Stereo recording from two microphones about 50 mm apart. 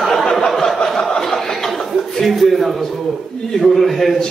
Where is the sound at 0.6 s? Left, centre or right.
Centre.